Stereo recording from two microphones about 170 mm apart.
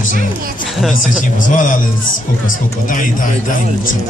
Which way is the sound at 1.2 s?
50° left (ahead or behind).